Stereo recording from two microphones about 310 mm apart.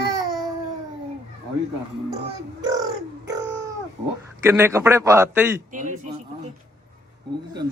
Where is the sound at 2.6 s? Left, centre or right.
Centre.